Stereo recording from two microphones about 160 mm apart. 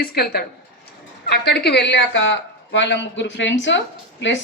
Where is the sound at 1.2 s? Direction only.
90° left.